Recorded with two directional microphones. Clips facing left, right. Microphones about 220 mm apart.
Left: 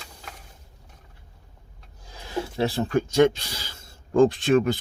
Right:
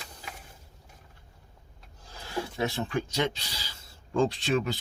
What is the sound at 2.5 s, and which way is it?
Speech, 35° left (ahead or behind).